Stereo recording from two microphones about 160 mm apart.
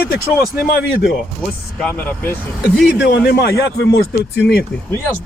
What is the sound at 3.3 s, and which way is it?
Speech, 80° left.